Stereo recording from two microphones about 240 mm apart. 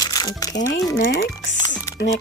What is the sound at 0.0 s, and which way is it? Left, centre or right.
Music, centre.